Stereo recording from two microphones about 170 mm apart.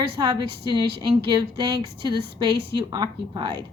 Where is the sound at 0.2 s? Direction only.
25° right (ahead or behind).